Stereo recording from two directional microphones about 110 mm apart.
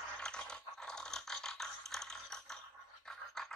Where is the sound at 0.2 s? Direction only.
5° left (ahead or behind).